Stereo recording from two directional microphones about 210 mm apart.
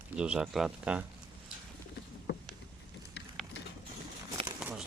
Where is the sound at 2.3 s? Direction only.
55° left (ahead or behind).